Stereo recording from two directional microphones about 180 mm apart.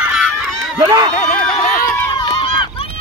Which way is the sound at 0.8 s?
25° right (ahead or behind).